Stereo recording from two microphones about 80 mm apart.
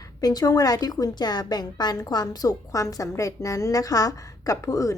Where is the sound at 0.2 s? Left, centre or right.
Left.